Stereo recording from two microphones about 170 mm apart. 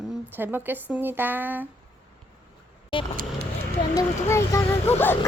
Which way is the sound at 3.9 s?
15° left (ahead or behind).